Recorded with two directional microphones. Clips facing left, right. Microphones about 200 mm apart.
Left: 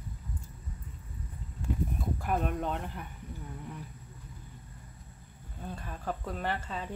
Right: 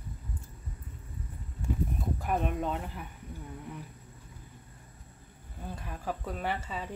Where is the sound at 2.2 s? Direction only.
Centre (ahead or behind).